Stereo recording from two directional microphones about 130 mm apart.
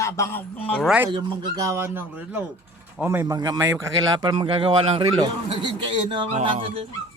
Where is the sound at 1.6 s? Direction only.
20° right (ahead or behind).